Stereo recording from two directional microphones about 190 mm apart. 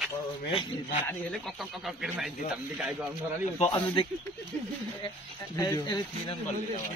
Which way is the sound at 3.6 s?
30° left (ahead or behind).